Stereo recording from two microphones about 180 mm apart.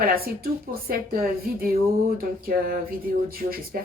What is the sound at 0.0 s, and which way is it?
A woman's voice, 55° right (ahead or behind).